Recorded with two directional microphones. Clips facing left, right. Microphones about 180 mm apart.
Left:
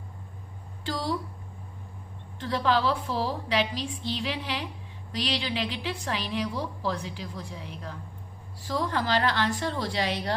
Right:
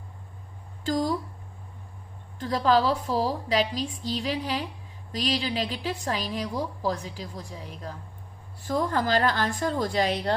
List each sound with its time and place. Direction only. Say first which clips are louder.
0.9 s a woman's voice: right 5 dB; 45° right (ahead or behind)
2.4 s a woman's voice: right 3 dB; 40° right (ahead or behind)